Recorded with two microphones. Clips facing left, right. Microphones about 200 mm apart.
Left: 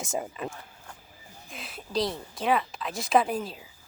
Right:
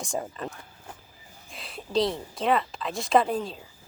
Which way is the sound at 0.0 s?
5° left (ahead or behind).